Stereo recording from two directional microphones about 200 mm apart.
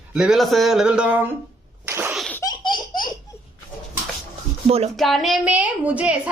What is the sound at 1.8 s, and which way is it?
Sneeze, 10° right (ahead or behind).